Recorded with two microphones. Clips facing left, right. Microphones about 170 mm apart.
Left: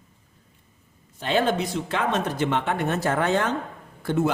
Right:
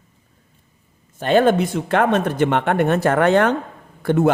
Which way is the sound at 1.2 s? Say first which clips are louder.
Right 8 dB; 50° right (ahead or behind).